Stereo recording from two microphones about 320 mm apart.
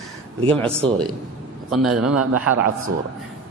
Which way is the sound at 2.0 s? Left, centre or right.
Right.